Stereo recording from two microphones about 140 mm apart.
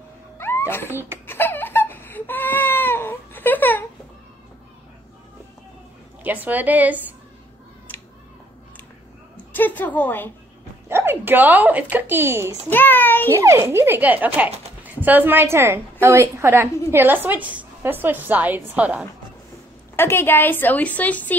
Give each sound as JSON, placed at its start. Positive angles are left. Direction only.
{"t": 0.4, "sound": "cat", "side_deg": 15}
{"t": 0.8, "sound": "speech", "side_deg": -15}
{"t": 1.2, "sound": "baby cry", "side_deg": 15}
{"t": 6.2, "sound": "speech", "side_deg": -10}
{"t": 7.9, "sound": "a sound", "side_deg": 15}
{"t": 9.5, "sound": "a woman's voice", "side_deg": 15}
{"t": 10.9, "sound": "speech", "side_deg": -15}
{"t": 12.6, "sound": "a child's voice", "side_deg": 15}
{"t": 13.3, "sound": "speech", "side_deg": -20}
{"t": 20.0, "sound": "a woman's voice", "side_deg": 15}